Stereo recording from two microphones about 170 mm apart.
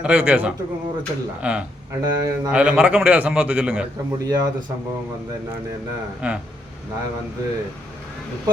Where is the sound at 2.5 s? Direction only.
5° right (ahead or behind).